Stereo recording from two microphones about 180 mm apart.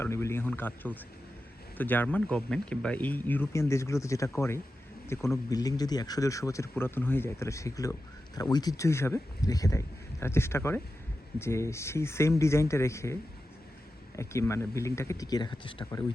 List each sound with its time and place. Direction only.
0.0 s speech: 15° left (ahead or behind)
14.2 s speech: 15° left (ahead or behind)